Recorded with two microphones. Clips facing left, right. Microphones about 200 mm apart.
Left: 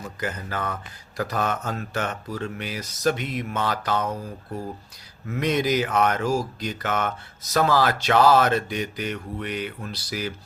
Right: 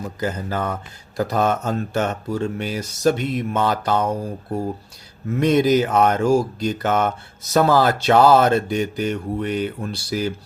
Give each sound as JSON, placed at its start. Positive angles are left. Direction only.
{"t": 0.2, "sound": "speech", "side_deg": -30}
{"t": 9.0, "sound": "mantra", "side_deg": -30}
{"t": 9.6, "sound": "speech", "side_deg": -30}